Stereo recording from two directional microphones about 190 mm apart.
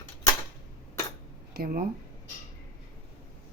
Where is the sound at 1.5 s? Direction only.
50° right (ahead or behind).